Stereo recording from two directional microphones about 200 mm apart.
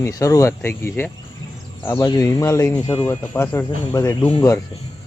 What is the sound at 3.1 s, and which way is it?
Speech, 10° left (ahead or behind).